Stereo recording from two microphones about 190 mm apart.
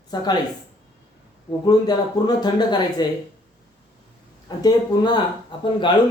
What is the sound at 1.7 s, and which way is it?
Speech, 20° left (ahead or behind).